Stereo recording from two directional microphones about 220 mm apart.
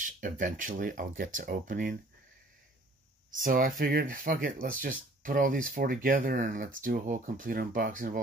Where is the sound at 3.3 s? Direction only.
40° right (ahead or behind).